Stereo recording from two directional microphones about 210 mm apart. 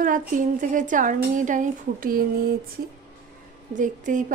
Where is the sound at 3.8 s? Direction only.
35° right (ahead or behind).